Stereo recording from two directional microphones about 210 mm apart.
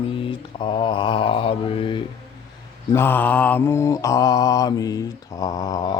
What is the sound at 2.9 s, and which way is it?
Mantra, 10° left (ahead or behind).